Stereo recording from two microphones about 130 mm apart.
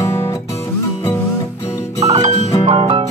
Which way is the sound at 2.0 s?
55° right (ahead or behind).